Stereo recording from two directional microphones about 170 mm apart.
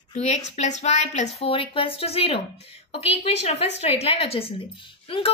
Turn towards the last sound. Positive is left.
turn(degrees=30)  # may be behind; listen again after turning